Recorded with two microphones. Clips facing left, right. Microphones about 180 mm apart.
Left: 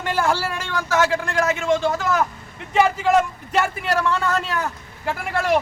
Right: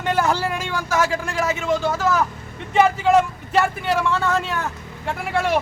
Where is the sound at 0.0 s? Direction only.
20° right (ahead or behind).